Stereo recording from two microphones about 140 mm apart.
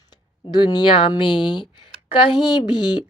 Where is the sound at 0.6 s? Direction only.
30° left (ahead or behind).